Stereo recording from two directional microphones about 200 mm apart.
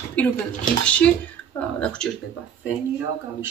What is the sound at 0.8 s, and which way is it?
Speech, 5° left (ahead or behind).